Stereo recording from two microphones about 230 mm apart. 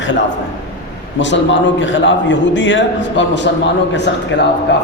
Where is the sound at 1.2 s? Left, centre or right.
Left.